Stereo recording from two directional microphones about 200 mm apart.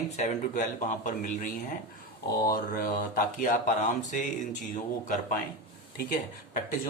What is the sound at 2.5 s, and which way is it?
Speech, 45° left (ahead or behind).